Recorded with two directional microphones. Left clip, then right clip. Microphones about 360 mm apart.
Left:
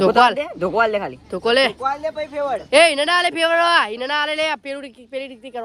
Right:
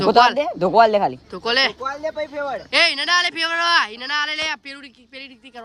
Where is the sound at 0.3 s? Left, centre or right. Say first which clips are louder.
Right 4 dB; right.